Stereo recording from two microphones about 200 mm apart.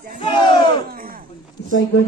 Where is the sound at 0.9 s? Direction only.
45° right (ahead or behind).